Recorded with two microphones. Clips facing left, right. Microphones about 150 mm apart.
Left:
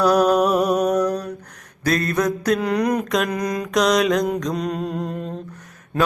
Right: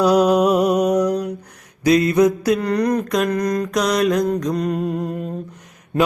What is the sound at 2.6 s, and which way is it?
Mantra, centre (ahead or behind).